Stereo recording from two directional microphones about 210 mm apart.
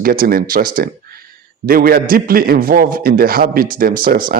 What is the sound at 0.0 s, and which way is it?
Speech, 45° right (ahead or behind).